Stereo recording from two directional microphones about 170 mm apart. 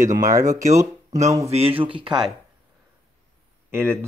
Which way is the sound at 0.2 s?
20° right (ahead or behind).